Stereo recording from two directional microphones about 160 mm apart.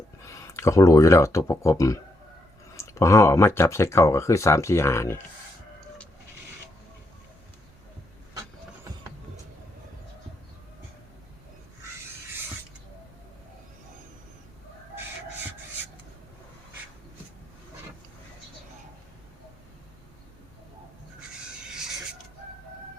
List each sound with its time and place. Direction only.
0.4 s speech: 20° left (ahead or behind)